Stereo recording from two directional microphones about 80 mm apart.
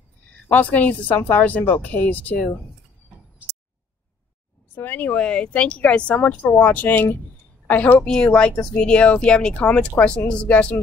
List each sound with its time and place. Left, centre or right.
0.5 s speech: centre
4.7 s a woman's voice: left